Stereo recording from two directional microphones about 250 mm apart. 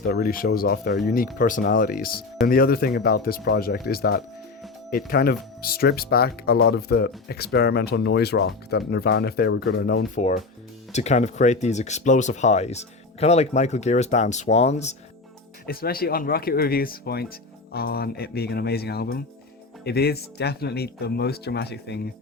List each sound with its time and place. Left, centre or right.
0.1 s speech: left
10.2 s speech: left
15.6 s speech: left